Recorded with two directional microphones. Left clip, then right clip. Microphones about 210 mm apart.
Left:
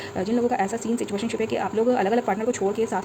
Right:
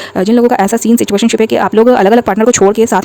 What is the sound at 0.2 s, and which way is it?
Speech, 50° right (ahead or behind).